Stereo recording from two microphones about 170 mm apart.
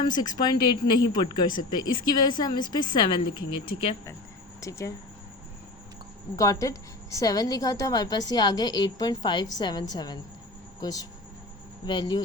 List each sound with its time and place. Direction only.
0.0 s a woman's voice: 25° left (ahead or behind)
4.6 s speech: 20° left (ahead or behind)
6.3 s a woman's voice: 20° left (ahead or behind)